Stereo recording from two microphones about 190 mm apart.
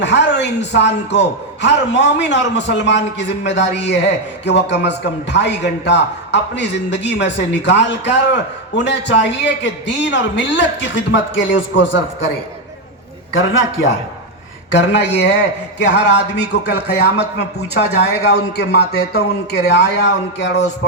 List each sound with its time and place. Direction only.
0.0 s a man's voice: 65° left (ahead or behind)
13.3 s a man's voice: 80° left
14.7 s a man's voice: 65° left (ahead or behind)